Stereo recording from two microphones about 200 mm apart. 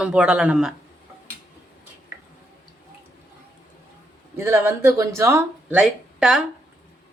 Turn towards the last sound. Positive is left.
turn(degrees=-5)  # may be behind; listen again after turning